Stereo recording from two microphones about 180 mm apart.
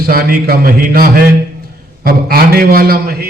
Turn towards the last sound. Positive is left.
turn(degrees=-55)  # may be behind; listen again after turning